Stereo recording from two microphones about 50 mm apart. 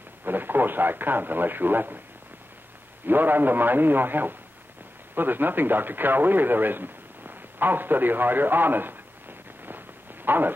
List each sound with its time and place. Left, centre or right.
0.2 s a man's voice: right
3.1 s a man's voice: right
9.7 s a sound: right